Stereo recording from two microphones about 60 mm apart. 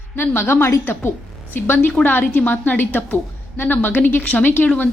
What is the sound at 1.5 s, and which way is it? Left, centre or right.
A woman's voice, left.